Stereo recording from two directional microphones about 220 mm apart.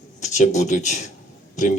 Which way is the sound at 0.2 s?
35° left (ahead or behind).